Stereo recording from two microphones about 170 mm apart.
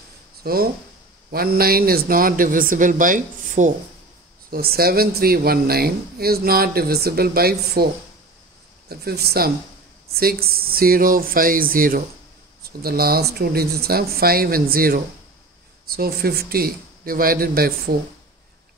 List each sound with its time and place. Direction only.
0.4 s speech: 65° right (ahead or behind)
4.5 s speech: 65° right (ahead or behind)
8.8 s speech: 65° right (ahead or behind)